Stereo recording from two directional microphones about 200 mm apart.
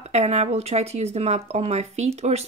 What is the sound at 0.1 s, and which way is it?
Speech, 30° right (ahead or behind).